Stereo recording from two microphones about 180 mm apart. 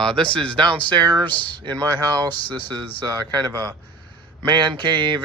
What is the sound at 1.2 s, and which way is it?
Speech, 10° left (ahead or behind).